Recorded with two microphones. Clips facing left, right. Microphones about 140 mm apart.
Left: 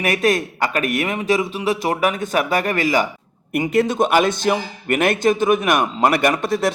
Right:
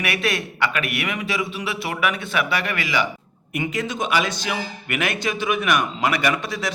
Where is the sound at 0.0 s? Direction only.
40° left (ahead or behind).